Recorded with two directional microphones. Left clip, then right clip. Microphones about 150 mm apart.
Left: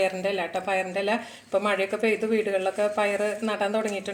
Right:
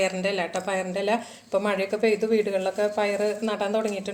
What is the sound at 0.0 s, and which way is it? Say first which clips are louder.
Speech: even; centre (ahead or behind).